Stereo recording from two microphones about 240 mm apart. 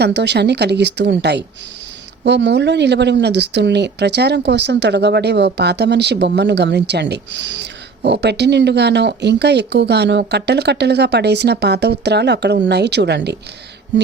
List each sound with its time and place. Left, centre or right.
0.0 s speech: right